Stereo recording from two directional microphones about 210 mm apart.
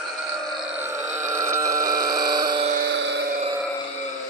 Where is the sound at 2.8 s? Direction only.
55° right (ahead or behind).